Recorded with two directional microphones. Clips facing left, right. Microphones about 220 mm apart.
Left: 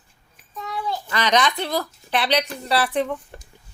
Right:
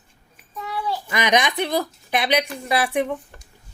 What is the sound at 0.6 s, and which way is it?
A child's voice, 10° right (ahead or behind).